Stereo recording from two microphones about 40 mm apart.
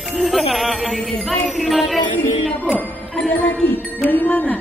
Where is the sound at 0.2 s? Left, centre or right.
Centre.